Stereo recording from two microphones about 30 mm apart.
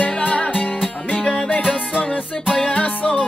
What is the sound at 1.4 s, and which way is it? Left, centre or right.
Music, left.